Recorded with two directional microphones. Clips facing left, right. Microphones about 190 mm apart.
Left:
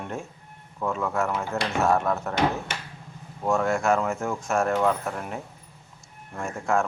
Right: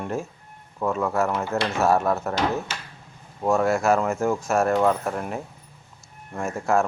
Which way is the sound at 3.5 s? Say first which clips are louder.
Right 3 dB; 5° right (ahead or behind).